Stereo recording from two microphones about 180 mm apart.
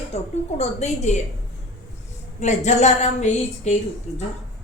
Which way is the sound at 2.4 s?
40° left (ahead or behind).